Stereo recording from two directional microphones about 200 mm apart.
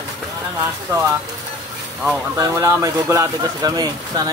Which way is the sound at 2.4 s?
15° right (ahead or behind).